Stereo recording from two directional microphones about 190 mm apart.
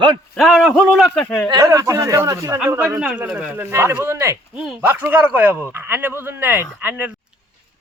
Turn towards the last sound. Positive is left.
turn(degrees=-10)  # may be behind; listen again after turning